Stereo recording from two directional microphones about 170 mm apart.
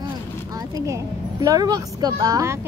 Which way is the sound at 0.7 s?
20° right (ahead or behind).